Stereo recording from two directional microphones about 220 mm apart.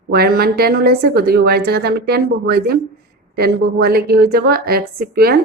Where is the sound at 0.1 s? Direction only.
45° right (ahead or behind).